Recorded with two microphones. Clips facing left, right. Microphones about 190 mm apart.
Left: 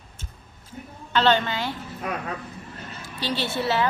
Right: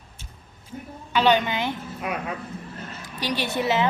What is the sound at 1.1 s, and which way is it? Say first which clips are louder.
Speech: right 1 dB; 15° right (ahead or behind).